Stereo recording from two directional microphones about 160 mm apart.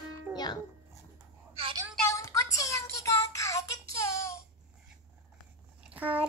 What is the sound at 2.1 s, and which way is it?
Child singing, 20° left (ahead or behind).